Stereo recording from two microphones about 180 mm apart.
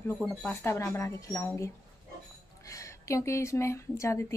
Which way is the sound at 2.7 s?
15° left (ahead or behind).